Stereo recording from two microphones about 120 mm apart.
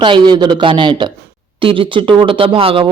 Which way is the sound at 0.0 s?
40° right (ahead or behind).